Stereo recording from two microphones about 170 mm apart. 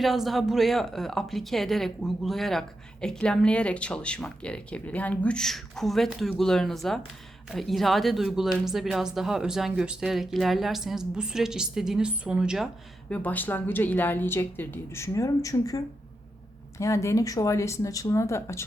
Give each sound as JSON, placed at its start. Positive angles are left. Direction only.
{"t": 0.0, "sound": "a woman's voice", "side_deg": 0}
{"t": 13.1, "sound": "a woman's voice", "side_deg": 10}